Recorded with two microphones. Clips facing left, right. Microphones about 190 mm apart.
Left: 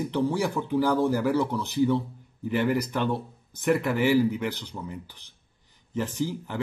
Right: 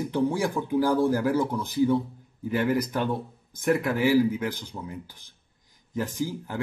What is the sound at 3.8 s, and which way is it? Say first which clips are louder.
Speech: right 1 dB; 10° right (ahead or behind).